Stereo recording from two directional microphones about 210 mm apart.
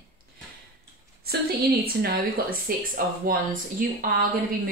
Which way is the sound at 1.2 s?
45° right (ahead or behind).